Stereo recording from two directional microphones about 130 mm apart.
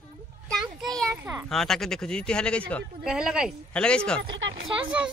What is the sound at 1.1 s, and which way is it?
Children playing, 20° right (ahead or behind).